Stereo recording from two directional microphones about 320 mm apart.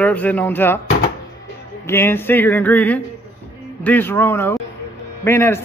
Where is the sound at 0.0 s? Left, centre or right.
Centre.